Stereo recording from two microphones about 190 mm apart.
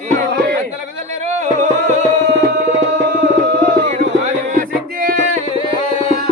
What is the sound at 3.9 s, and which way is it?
Music, 35° right (ahead or behind).